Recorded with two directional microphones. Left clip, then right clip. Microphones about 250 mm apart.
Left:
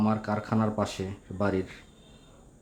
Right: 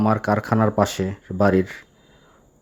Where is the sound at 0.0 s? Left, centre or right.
Right.